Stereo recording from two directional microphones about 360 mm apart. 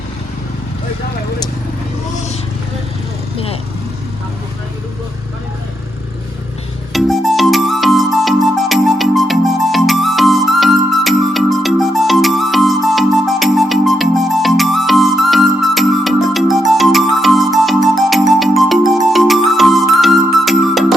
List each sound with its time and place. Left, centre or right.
3.3 s vehicle: centre
6.9 s music: centre